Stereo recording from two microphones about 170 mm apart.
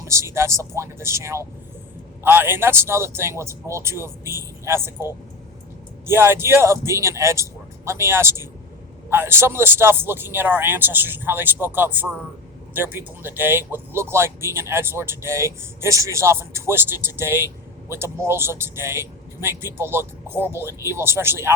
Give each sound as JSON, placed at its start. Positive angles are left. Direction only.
{"t": 0.0, "sound": "speech", "side_deg": -15}
{"t": 6.1, "sound": "speech", "side_deg": -15}